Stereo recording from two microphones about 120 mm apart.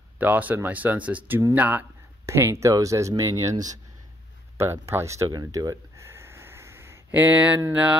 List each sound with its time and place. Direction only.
0.2 s speech: 15° right (ahead or behind)
4.6 s speech: 20° right (ahead or behind)